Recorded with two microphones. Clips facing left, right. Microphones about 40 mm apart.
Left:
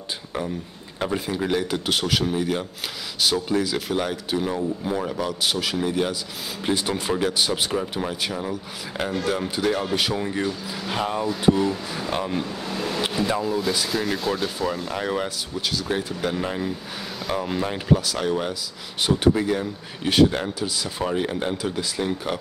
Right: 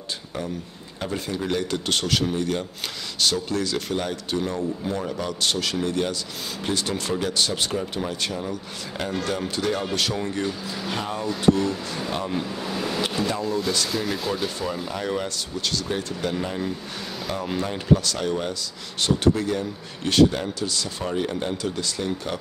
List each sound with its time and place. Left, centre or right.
0.9 s speech: left
1.5 s speech: centre
15.0 s speech: centre